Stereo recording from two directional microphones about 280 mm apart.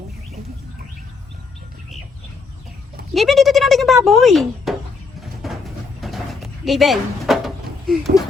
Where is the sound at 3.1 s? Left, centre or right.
Centre.